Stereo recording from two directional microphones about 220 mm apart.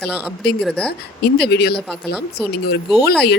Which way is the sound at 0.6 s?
5° left (ahead or behind).